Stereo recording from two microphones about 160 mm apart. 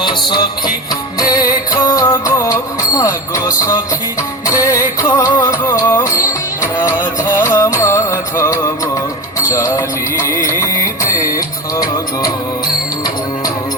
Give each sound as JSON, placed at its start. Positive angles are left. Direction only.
{"t": 0.0, "sound": "music", "side_deg": 30}
{"t": 3.0, "sound": "jingle bell", "side_deg": 20}
{"t": 4.4, "sound": "music", "side_deg": 20}